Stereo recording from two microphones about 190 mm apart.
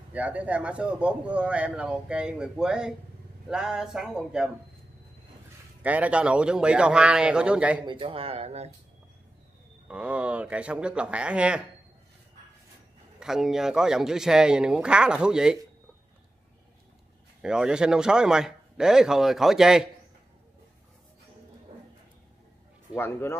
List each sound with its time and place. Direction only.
0.1 s speech: 10° right (ahead or behind)
5.8 s speech: 5° right (ahead or behind)
7.8 s speech: 25° right (ahead or behind)
9.8 s speech: 5° right (ahead or behind)
13.2 s speech: centre (ahead or behind)
17.4 s speech: 5° right (ahead or behind)
22.9 s speech: 10° left (ahead or behind)